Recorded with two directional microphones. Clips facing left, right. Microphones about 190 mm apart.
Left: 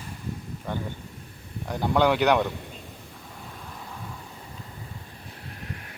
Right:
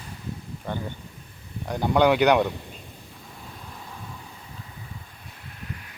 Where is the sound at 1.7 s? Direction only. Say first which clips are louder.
Right 2 dB; centre (ahead or behind).